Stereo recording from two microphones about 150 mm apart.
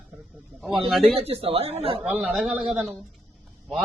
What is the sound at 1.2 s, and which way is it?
Speech, 40° right (ahead or behind).